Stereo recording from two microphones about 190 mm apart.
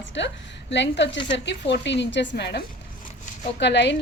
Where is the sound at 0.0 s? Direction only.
70° left (ahead or behind).